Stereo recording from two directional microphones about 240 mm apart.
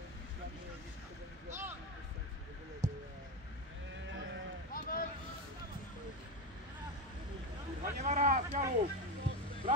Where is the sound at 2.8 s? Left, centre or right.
Centre.